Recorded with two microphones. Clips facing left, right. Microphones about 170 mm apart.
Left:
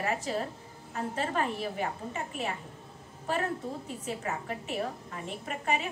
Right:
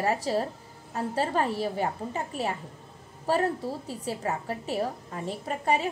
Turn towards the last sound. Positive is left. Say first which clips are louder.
# right 5 dB
turn(degrees=-35)  # may be behind; listen again after turning